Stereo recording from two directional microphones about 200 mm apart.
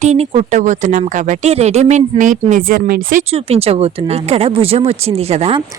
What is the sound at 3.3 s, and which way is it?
Speech, 30° right (ahead or behind).